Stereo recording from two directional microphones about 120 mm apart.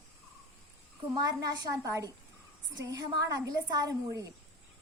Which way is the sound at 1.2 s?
35° right (ahead or behind).